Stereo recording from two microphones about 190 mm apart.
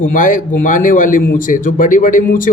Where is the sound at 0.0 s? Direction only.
45° left (ahead or behind).